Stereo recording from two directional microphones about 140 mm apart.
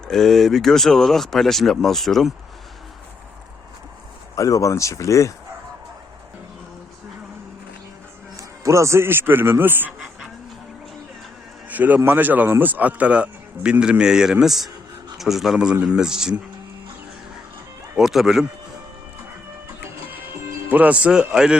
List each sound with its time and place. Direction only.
0.1 s speech: centre (ahead or behind)
4.4 s speech: 25° left (ahead or behind)
8.4 s speech: 20° right (ahead or behind)
11.7 s a man's voice: 10° right (ahead or behind)
17.9 s speech: centre (ahead or behind)
20.1 s music: 15° right (ahead or behind)